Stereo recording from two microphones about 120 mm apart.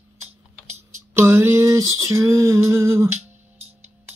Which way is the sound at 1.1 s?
20° right (ahead or behind).